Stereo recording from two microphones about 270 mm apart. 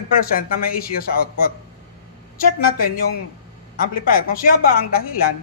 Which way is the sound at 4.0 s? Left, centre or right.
Left.